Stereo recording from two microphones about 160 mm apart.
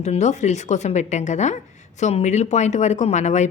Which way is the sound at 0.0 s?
45° left (ahead or behind).